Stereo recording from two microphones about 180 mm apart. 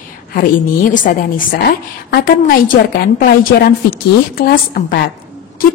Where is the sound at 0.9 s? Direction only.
45° left (ahead or behind).